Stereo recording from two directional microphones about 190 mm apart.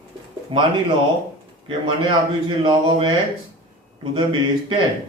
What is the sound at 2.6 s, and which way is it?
Speech, 25° right (ahead or behind).